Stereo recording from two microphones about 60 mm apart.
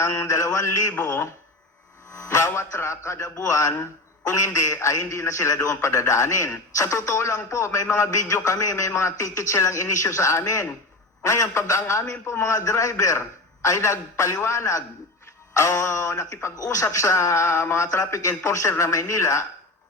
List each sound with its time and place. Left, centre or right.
0.0 s a man's voice: left
0.9 s a man's voice: left
2.1 s a man's voice: left